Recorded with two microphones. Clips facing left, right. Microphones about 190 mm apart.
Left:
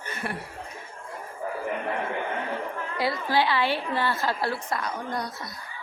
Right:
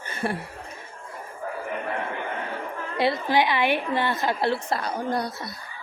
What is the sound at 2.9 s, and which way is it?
A woman's voice, 20° right (ahead or behind).